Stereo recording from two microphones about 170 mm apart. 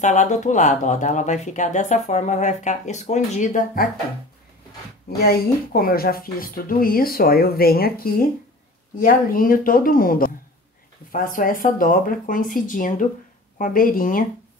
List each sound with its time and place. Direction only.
0.0 s speech: 45° left (ahead or behind)
5.2 s speech: 60° left (ahead or behind)